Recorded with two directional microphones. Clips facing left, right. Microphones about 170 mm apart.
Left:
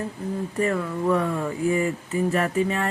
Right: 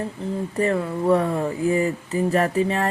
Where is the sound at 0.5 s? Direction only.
35° right (ahead or behind).